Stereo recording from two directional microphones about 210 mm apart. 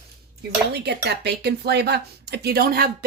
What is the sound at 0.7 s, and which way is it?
Speech, 50° right (ahead or behind).